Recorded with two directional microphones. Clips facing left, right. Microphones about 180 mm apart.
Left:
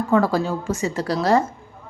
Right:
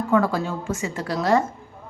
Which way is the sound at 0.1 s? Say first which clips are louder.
Left 2 dB; 35° left (ahead or behind).